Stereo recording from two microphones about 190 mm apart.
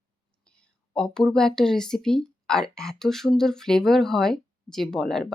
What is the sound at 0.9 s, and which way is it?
Speech, 5° left (ahead or behind).